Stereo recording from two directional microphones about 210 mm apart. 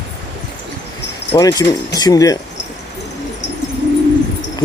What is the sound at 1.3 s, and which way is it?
Speech, 20° left (ahead or behind).